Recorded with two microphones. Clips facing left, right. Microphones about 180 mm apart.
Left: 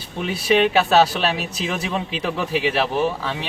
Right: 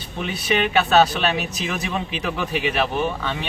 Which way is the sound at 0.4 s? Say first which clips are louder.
Left 4 dB; 35° left (ahead or behind).